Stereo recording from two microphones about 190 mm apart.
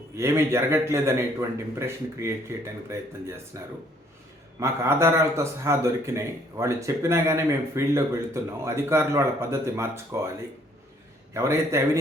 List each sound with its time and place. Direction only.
0.2 s a man's voice: 15° right (ahead or behind)
11.3 s a man's voice: 15° right (ahead or behind)